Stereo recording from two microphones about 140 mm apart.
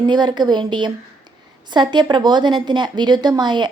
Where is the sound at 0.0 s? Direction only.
30° right (ahead or behind).